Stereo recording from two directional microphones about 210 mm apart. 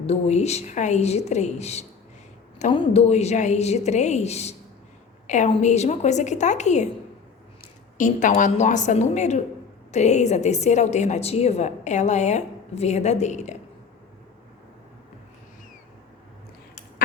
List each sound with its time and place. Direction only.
0.0 s a woman's voice: 30° left (ahead or behind)
7.9 s a woman's voice: 35° left (ahead or behind)